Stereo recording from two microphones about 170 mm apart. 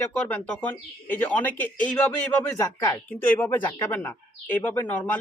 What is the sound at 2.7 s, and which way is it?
Speech, 20° left (ahead or behind).